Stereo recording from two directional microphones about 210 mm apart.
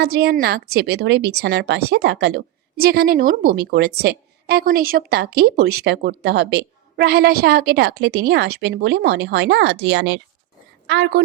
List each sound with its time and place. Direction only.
0.0 s a woman's voice: 50° right (ahead or behind)